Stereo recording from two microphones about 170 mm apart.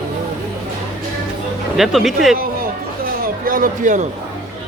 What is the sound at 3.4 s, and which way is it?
Speech, 55° right (ahead or behind).